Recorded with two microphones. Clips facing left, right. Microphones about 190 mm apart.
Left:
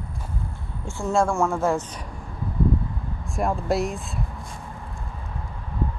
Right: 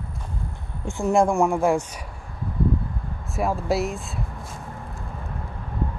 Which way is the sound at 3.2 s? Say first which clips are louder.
Even; 5° right (ahead or behind).